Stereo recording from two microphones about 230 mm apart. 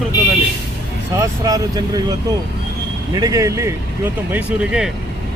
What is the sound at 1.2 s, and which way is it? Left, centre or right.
Speech, centre.